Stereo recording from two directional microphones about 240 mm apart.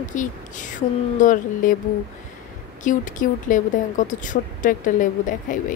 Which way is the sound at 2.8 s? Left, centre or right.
Left.